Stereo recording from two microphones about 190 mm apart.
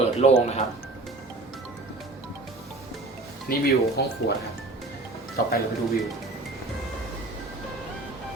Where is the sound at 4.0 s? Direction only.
60° left (ahead or behind).